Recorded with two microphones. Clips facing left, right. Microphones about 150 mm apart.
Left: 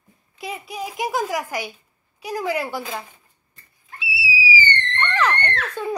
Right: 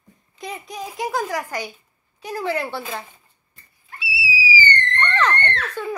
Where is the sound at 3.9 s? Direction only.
20° left (ahead or behind).